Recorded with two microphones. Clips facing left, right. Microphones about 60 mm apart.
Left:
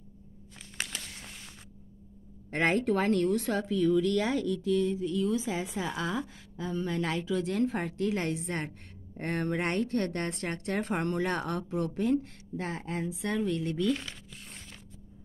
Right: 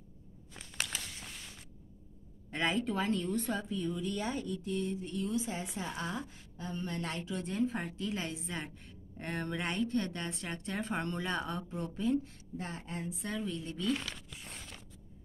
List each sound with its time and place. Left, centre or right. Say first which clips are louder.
2.5 s a woman's voice: left 6 dB; left